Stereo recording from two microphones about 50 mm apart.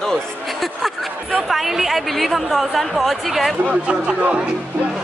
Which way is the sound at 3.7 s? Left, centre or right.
Centre.